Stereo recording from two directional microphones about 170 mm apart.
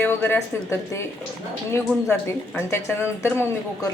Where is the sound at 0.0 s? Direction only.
10° left (ahead or behind).